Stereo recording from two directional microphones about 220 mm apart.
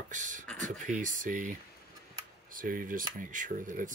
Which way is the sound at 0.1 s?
35° right (ahead or behind).